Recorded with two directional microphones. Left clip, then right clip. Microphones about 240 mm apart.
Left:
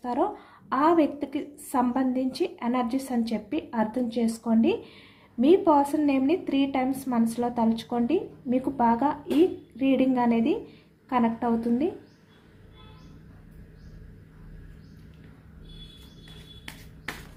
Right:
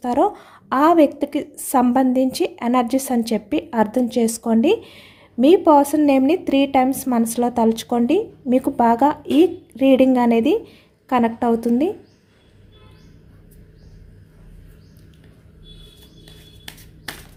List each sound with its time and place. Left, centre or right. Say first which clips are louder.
0.0 s a woman's voice: right 9 dB; right